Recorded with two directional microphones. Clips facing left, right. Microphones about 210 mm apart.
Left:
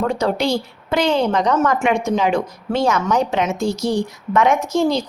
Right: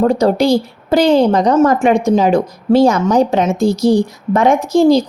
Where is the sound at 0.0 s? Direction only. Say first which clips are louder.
Right 7 dB; 35° right (ahead or behind).